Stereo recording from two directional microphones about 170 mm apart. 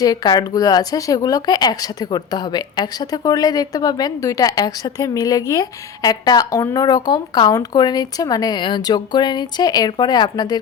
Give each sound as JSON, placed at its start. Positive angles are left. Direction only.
{"t": 0.0, "sound": "speech", "side_deg": 20}